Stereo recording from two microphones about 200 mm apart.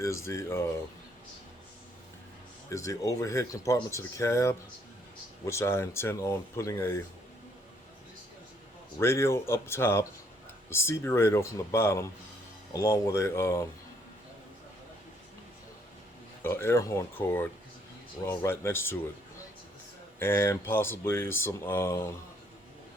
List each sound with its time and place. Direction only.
0.0 s speech: 15° left (ahead or behind)
2.6 s speech: 15° left (ahead or behind)
9.0 s speech: 15° left (ahead or behind)
16.4 s speech: 10° left (ahead or behind)
20.1 s speech: 10° left (ahead or behind)